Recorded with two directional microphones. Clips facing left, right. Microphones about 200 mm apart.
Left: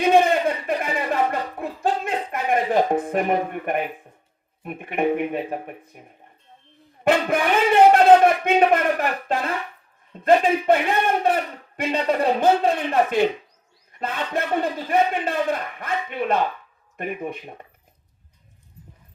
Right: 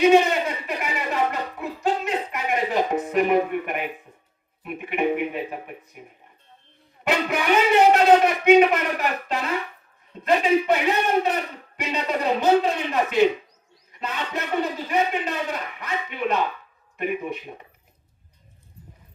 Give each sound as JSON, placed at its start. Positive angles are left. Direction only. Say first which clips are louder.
{"t": 0.0, "sound": "a sound", "louder": "even", "side_deg": 55}
{"t": 4.6, "sound": "a man's voice", "louder": "left 1 dB", "side_deg": 45}
{"t": 7.0, "sound": "a man's voice", "louder": "left 4 dB", "side_deg": 50}